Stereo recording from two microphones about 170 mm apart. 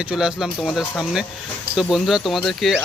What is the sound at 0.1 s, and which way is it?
Speech, 5° right (ahead or behind).